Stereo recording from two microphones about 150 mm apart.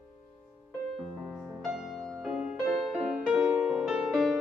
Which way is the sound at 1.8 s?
Centre (ahead or behind).